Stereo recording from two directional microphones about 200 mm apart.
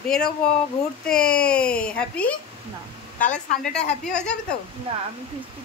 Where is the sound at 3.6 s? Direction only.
5° left (ahead or behind).